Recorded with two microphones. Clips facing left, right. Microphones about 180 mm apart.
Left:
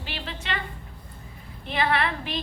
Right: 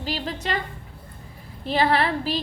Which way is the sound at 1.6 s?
35° right (ahead or behind).